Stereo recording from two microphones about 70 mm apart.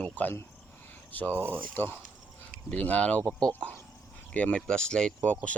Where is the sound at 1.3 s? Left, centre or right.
Right.